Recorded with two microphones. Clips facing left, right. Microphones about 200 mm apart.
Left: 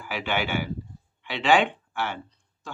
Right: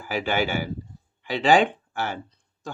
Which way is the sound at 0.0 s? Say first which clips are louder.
Right 4 dB; 40° right (ahead or behind).